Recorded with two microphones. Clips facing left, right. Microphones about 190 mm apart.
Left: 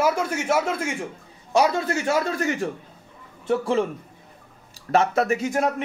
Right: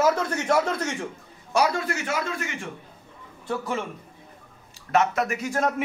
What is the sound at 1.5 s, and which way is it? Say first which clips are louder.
A man's voice: left 3 dB; 20° left (ahead or behind).